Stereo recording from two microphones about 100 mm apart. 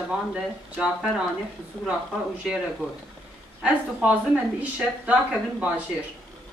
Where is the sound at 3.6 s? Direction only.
10° right (ahead or behind).